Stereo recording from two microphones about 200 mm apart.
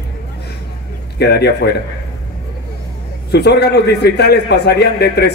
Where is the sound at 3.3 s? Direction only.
55° left (ahead or behind).